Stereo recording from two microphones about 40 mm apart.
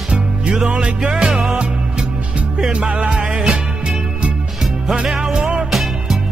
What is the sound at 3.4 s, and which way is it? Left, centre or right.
Music, centre.